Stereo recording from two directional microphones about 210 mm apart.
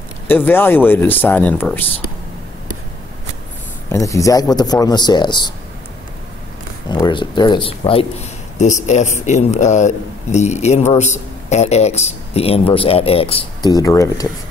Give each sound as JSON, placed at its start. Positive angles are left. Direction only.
{"t": 0.3, "sound": "speech", "side_deg": 10}
{"t": 3.9, "sound": "a man's voice", "side_deg": 15}
{"t": 6.9, "sound": "speech", "side_deg": 20}
{"t": 13.7, "sound": "speech", "side_deg": 15}